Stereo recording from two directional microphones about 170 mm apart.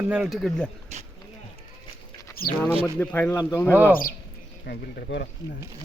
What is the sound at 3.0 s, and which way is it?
Speech, 10° left (ahead or behind).